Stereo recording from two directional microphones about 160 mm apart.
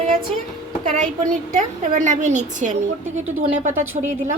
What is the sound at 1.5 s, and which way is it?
Speech, 50° right (ahead or behind).